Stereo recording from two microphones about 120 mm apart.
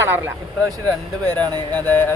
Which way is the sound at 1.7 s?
15° left (ahead or behind).